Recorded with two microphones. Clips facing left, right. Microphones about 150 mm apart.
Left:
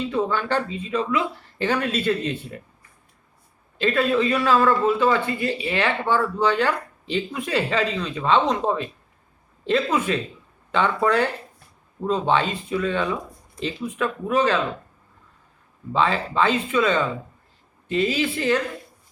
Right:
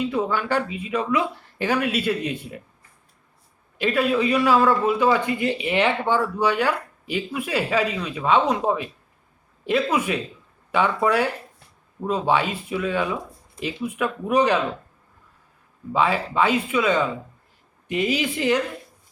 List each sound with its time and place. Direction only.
0.0 s speech: 10° right (ahead or behind)
3.8 s speech: 10° right (ahead or behind)
15.9 s speech: 10° right (ahead or behind)